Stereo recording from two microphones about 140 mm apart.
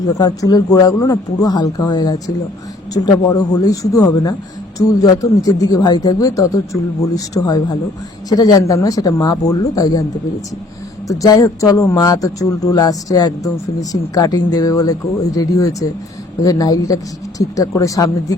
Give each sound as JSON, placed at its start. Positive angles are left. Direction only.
{"t": 0.1, "sound": "speech", "side_deg": 25}
{"t": 11.1, "sound": "speech", "side_deg": 25}